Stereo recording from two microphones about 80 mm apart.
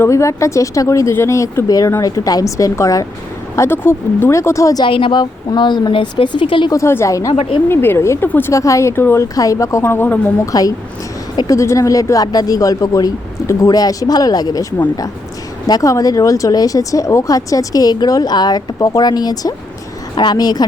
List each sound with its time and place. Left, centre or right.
0.0 s speech: left
1.6 s speech: left
4.8 s speech: left
6.7 s speech: left
7.7 s speech: left
8.5 s speech: left
9.3 s speech: left
9.8 s speech: left
10.4 s speech: left
20.1 s speech: left